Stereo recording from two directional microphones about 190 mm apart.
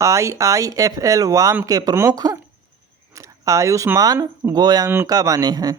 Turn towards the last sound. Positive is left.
turn(degrees=-20)  # may be behind; listen again after turning